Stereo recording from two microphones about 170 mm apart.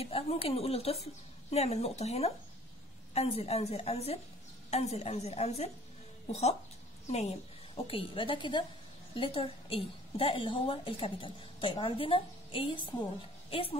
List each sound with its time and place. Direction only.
0.0 s a woman's voice: 35° left (ahead or behind)
7.1 s a woman's voice: 40° left (ahead or behind)